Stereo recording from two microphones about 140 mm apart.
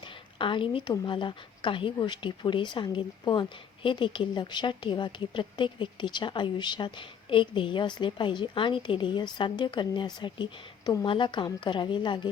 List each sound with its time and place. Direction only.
0.0 s a woman's voice: 35° left (ahead or behind)